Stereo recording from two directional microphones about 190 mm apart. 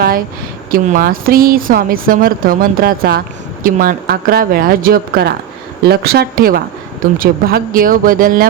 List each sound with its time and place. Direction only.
0.7 s speech: 45° right (ahead or behind)